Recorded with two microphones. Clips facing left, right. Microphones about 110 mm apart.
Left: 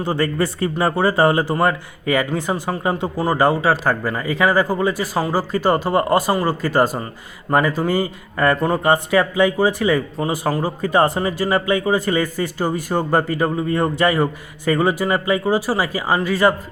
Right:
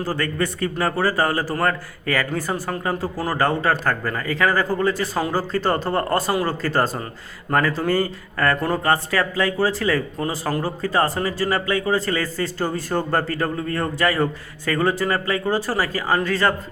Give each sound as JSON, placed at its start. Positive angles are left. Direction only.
{"t": 0.0, "sound": "a man's voice", "side_deg": 25}